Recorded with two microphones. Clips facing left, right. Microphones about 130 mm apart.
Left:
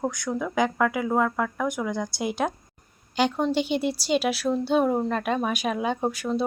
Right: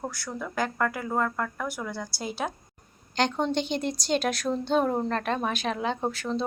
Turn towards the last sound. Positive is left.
turn(degrees=10)  # may be behind; listen again after turning